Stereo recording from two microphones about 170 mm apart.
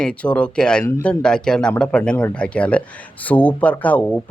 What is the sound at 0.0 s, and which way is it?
Speech, 5° left (ahead or behind).